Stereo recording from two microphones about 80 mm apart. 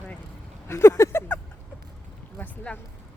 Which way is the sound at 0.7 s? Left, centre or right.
Left.